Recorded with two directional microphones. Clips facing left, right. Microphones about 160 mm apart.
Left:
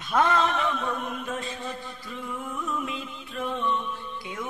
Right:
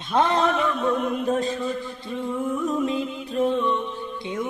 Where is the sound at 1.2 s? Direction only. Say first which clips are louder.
Right 10 dB; 35° right (ahead or behind).